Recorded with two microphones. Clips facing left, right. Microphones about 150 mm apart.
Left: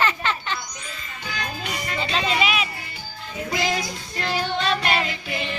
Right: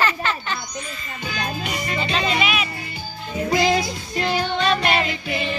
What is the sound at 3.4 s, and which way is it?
Music, 30° right (ahead or behind).